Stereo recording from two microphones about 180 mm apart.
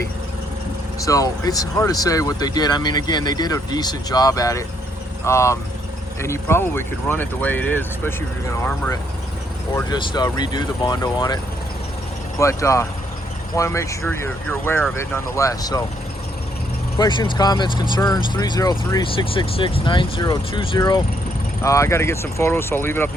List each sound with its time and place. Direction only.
1.0 s speech: 20° left (ahead or behind)
9.7 s speech: 25° left (ahead or behind)
12.4 s speech: 15° left (ahead or behind)
17.0 s speech: 25° left (ahead or behind)